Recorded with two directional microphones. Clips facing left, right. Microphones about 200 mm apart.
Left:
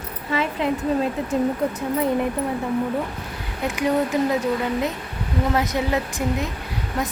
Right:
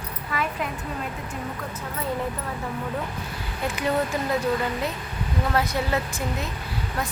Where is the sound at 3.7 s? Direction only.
15° left (ahead or behind).